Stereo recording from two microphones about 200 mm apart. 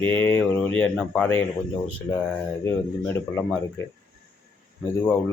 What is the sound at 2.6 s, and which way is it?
Speech, 15° left (ahead or behind).